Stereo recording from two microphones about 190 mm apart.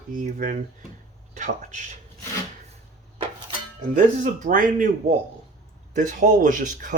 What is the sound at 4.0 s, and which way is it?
Speech, 45° right (ahead or behind).